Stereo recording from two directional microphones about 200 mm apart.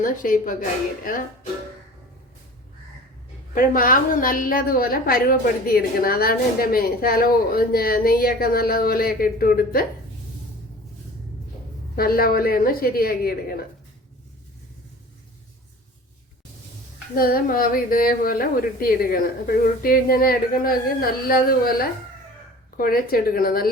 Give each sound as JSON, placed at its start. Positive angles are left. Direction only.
{"t": 0.0, "sound": "a woman's voice", "side_deg": 40}
{"t": 3.5, "sound": "a woman's voice", "side_deg": 45}
{"t": 11.9, "sound": "a woman's voice", "side_deg": 50}
{"t": 17.2, "sound": "a woman's voice", "side_deg": 45}